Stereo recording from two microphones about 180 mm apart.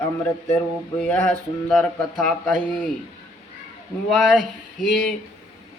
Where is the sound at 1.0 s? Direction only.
5° left (ahead or behind).